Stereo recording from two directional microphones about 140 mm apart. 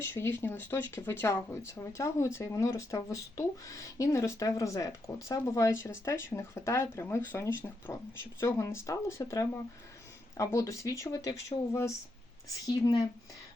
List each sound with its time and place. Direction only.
0.0 s speech: 15° left (ahead or behind)